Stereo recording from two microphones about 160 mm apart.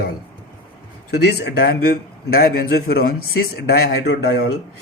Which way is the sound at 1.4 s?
85° left.